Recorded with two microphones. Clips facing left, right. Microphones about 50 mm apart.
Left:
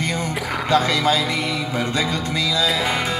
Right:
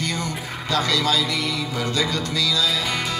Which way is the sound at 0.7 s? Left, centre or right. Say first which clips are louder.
Left 3 dB; left.